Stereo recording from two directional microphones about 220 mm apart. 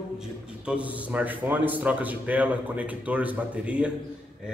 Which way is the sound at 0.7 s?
5° right (ahead or behind).